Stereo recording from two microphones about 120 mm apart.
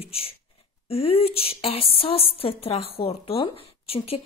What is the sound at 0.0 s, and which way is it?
A woman's voice, 55° left (ahead or behind).